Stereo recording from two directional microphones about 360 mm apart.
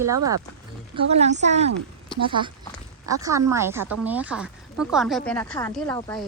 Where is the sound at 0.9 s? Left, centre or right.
Centre.